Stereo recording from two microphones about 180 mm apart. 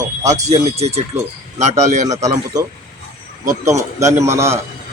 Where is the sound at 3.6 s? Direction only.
15° right (ahead or behind).